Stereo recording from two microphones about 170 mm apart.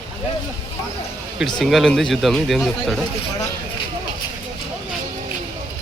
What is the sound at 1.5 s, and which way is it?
A man's voice, centre (ahead or behind).